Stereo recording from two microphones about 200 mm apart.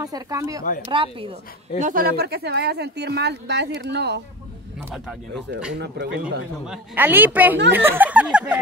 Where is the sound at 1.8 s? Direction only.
40° right (ahead or behind); by 4.2 s 60° right (ahead or behind).